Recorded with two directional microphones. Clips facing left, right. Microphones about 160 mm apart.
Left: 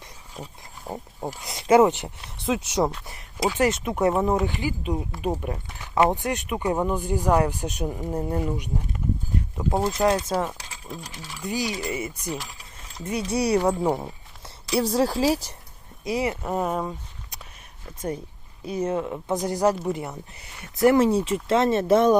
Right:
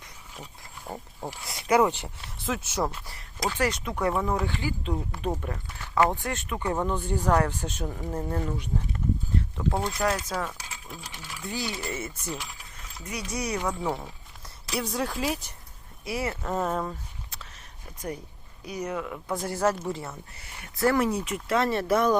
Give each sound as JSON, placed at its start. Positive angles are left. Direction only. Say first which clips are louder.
{"t": 0.9, "sound": "speech", "louder": "left 4 dB", "side_deg": 20}
{"t": 10.8, "sound": "coin", "louder": "left 8 dB", "side_deg": 0}
{"t": 11.4, "sound": "speech", "louder": "left 5 dB", "side_deg": 15}
{"t": 13.1, "sound": "speech", "louder": "left 8 dB", "side_deg": 30}
{"t": 16.0, "sound": "speech", "louder": "left 5 dB", "side_deg": 20}
{"t": 18.6, "sound": "speech", "louder": "left 6 dB", "side_deg": 25}